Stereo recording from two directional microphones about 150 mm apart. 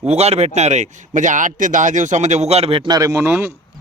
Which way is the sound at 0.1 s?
45° right (ahead or behind).